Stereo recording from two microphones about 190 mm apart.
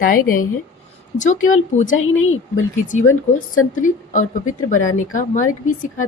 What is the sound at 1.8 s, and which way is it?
Speech, 90° left.